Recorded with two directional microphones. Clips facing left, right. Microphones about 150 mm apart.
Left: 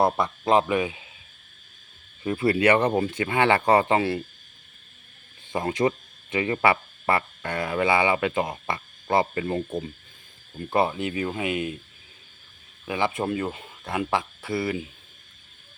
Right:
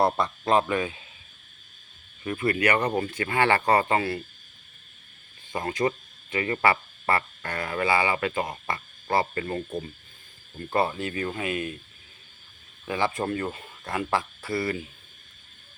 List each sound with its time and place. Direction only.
0.0 s speech: 15° left (ahead or behind)
2.2 s speech: 25° left (ahead or behind)
5.5 s speech: 20° left (ahead or behind)
12.8 s speech: 10° left (ahead or behind)